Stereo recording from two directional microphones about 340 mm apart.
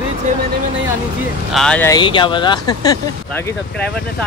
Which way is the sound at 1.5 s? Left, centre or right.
Centre.